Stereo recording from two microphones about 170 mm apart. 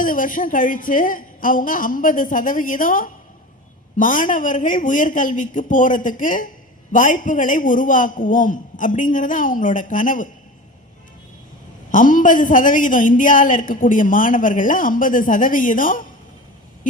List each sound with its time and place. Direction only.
0.0 s a woman's voice: 55° left (ahead or behind)
11.9 s a woman's voice: 50° left (ahead or behind)